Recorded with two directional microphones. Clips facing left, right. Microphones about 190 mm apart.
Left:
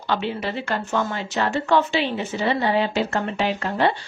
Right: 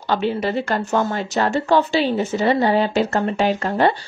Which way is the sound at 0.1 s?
40° right (ahead or behind).